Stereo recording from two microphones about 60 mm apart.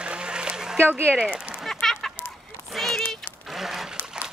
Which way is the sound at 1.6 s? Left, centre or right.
Centre.